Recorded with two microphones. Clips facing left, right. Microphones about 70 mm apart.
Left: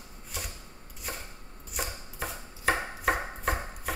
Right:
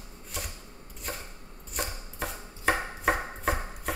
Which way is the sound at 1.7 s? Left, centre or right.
Centre.